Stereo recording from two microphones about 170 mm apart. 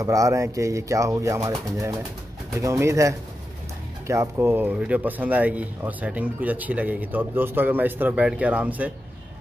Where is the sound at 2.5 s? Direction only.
15° right (ahead or behind).